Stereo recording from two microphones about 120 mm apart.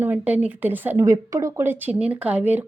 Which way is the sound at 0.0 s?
15° right (ahead or behind).